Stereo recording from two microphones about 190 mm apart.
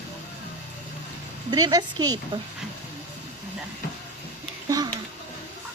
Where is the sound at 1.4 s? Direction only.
20° right (ahead or behind).